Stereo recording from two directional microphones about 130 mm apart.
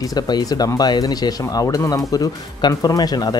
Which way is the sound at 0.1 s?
30° left (ahead or behind).